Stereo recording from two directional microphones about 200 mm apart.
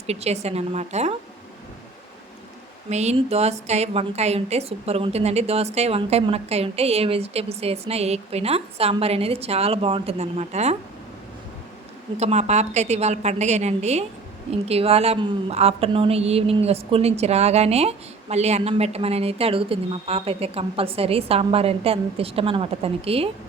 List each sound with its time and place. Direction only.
0.1 s a woman's voice: 30° right (ahead or behind)
2.9 s a woman's voice: 35° right (ahead or behind)
12.1 s a woman's voice: 35° right (ahead or behind)